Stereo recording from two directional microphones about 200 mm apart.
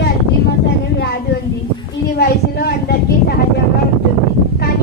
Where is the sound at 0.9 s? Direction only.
55° left (ahead or behind).